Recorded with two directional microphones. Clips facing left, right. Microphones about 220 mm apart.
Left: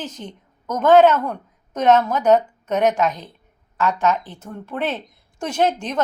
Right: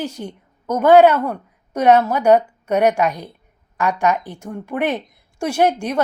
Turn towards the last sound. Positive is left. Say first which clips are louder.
# right 3 dB
turn(degrees=-10)  # may be behind; listen again after turning